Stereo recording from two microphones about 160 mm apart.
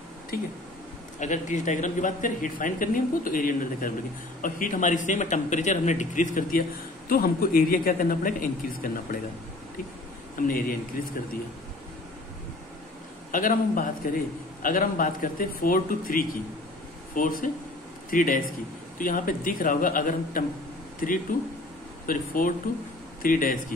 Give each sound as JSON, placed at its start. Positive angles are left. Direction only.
{"t": 1.2, "sound": "a man's voice", "side_deg": 50}
{"t": 7.1, "sound": "speech", "side_deg": 65}
{"t": 10.4, "sound": "speech", "side_deg": 60}
{"t": 13.3, "sound": "speech", "side_deg": 55}